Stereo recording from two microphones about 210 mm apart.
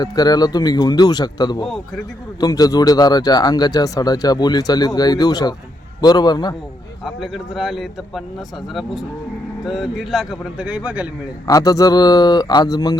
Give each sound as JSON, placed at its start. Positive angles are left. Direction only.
{"t": 0.0, "sound": "speech", "side_deg": 20}
{"t": 7.0, "sound": "a man's voice", "side_deg": 0}
{"t": 11.4, "sound": "speech", "side_deg": 15}